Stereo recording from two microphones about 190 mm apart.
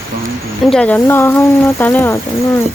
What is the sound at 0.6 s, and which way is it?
Speech, 5° left (ahead or behind).